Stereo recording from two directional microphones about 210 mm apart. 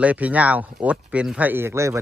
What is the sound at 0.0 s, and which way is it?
Speech, 5° right (ahead or behind).